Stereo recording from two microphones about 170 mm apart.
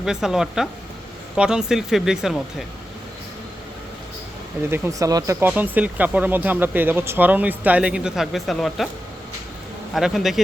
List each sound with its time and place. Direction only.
0.0 s speech: 5° right (ahead or behind)
4.7 s speech: 20° right (ahead or behind); by 8.9 s centre (ahead or behind)
9.9 s speech: centre (ahead or behind)